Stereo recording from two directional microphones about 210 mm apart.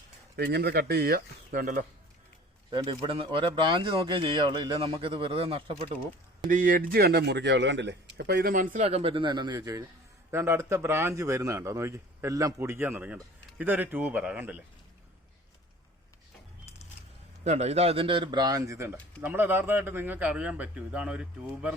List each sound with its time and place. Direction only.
0.3 s speech: 50° right (ahead or behind)
2.6 s speech: 25° right (ahead or behind)
6.5 s speech: 40° right (ahead or behind)
8.8 s a man's voice: 30° right (ahead or behind); by 14.6 s 5° right (ahead or behind)
17.4 s a man's voice: 30° right (ahead or behind); by 21.8 s 5° right (ahead or behind)